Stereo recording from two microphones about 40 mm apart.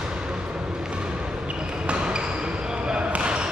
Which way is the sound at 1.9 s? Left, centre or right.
Right.